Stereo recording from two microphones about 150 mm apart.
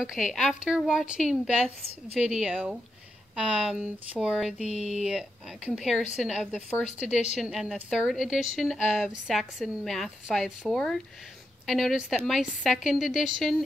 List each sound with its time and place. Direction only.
0.0 s a woman's voice: 5° right (ahead or behind)
4.6 s speech: 45° left (ahead or behind)
4.9 s a woman's voice: 5° right (ahead or behind)